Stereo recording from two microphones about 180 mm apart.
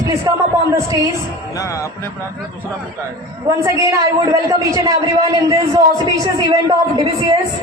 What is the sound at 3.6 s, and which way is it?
A man's voice, 15° right (ahead or behind).